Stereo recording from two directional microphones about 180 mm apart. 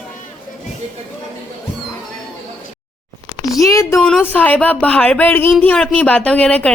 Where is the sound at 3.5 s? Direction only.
20° left (ahead or behind).